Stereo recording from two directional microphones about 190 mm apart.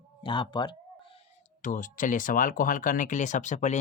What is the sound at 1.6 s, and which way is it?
Speech, 45° left (ahead or behind).